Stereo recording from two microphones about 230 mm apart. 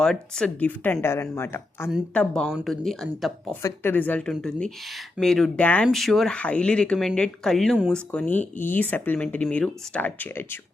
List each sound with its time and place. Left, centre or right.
0.0 s speech: centre
3.6 s speech: centre